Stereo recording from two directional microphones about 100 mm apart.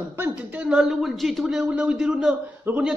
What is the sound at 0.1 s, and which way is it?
A man's voice, 15° right (ahead or behind).